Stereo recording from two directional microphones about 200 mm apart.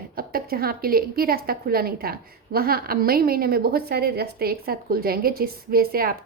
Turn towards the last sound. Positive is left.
turn(degrees=-45)  # may be behind; listen again after turning